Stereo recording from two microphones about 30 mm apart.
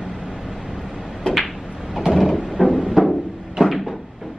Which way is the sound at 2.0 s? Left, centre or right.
Centre.